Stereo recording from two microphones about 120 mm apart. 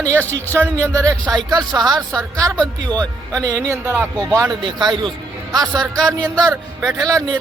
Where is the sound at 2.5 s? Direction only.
10° left (ahead or behind).